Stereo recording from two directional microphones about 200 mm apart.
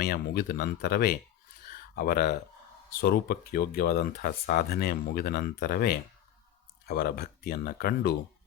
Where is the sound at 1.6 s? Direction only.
50° left (ahead or behind).